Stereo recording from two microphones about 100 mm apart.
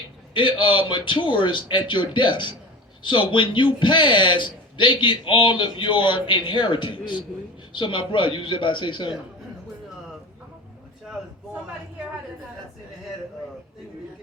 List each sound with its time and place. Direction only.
0.3 s a man's voice: 55° left (ahead or behind)